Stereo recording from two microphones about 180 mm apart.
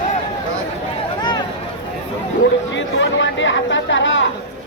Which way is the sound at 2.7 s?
90° left.